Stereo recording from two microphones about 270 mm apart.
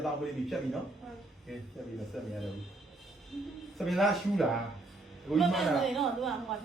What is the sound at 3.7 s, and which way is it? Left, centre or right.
A woman's voice, centre.